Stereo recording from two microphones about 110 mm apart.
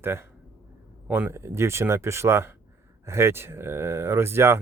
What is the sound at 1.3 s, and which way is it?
Speech, 25° right (ahead or behind).